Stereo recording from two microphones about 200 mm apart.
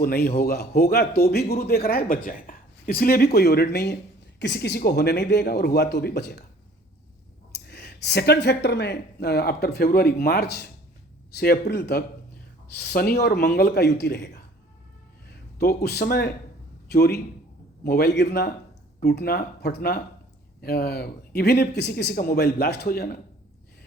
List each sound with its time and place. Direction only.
0.0 s a man's voice: 50° left (ahead or behind)
7.5 s a man's voice: 55° left (ahead or behind)